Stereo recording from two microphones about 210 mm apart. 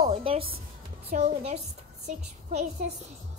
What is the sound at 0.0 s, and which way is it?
Music, 25° right (ahead or behind).